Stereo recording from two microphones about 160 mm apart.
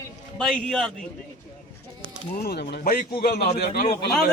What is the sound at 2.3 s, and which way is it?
A man's voice, 70° left (ahead or behind).